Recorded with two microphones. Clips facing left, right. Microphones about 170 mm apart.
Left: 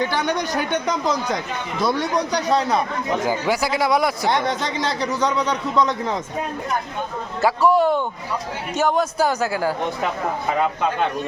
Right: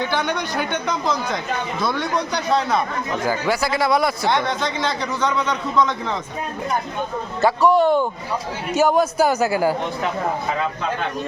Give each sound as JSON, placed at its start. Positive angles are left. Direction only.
{"t": 0.0, "sound": "a man's voice", "side_deg": 40}
{"t": 3.2, "sound": "speech", "side_deg": 15}
{"t": 4.3, "sound": "a man's voice", "side_deg": 40}
{"t": 7.4, "sound": "a man's voice", "side_deg": 5}